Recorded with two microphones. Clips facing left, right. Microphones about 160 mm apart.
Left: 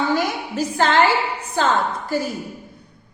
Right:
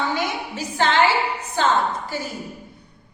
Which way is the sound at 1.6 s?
45° left (ahead or behind).